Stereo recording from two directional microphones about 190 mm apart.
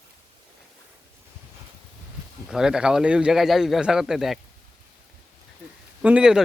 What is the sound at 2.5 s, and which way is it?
A man's voice, 5° right (ahead or behind).